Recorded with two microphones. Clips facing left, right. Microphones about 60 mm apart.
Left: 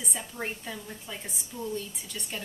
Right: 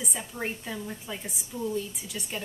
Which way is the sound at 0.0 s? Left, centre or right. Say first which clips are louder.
Right 2 dB; centre.